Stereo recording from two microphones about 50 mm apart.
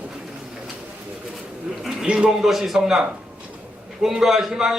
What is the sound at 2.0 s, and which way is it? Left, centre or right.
Speech, right.